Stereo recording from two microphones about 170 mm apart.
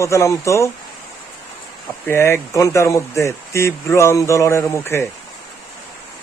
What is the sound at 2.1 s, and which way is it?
Speech, 15° left (ahead or behind).